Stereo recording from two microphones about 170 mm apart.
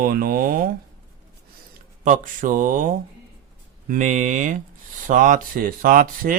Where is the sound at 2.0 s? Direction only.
50° right (ahead or behind).